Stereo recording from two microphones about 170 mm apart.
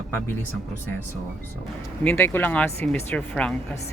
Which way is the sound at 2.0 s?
10° left (ahead or behind).